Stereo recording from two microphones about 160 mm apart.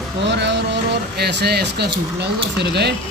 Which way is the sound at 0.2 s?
90° right.